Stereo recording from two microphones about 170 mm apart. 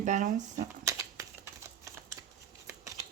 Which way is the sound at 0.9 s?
15° right (ahead or behind).